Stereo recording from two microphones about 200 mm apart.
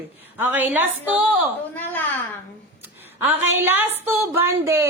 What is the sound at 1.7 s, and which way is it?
Speech, 10° left (ahead or behind).